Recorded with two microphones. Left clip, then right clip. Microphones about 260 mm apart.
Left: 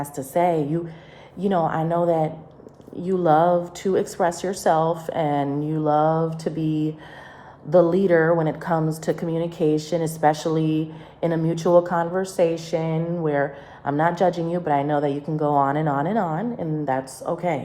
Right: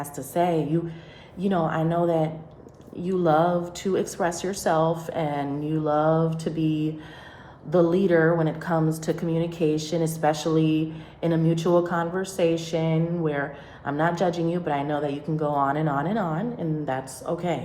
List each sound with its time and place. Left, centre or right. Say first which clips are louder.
0.3 s a woman's voice: left 3 dB; left
1.6 s a woman's voice: left 1 dB; left